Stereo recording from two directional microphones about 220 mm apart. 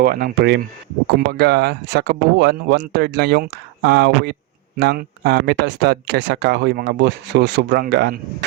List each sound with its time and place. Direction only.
0.0 s speech: 45° right (ahead or behind)